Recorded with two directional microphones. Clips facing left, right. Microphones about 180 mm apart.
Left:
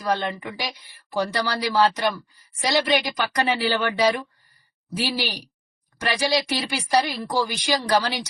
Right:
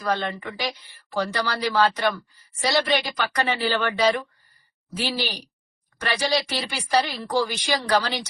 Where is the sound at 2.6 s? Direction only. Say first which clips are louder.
Left 1 dB; 15° left (ahead or behind).